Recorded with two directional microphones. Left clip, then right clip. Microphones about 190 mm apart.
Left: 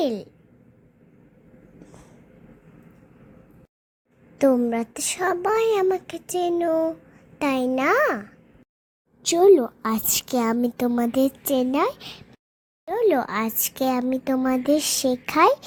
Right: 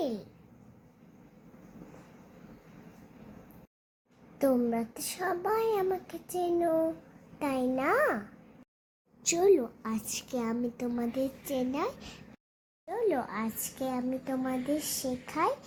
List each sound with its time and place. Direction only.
4.4 s a child's voice: 35° left (ahead or behind)
9.2 s a woman's voice: 35° left (ahead or behind)